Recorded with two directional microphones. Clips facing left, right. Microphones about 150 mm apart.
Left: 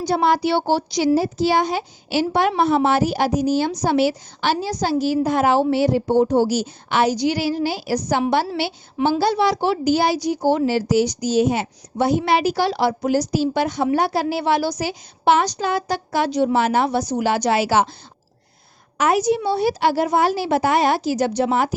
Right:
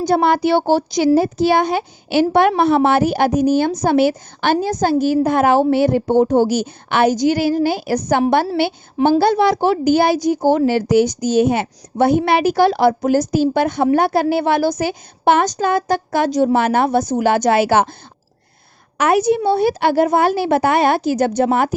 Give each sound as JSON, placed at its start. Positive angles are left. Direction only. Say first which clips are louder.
{"t": 0.0, "sound": "a woman's voice", "louder": "right 3 dB", "side_deg": -55}
{"t": 18.9, "sound": "a woman's voice", "louder": "right 3 dB", "side_deg": -60}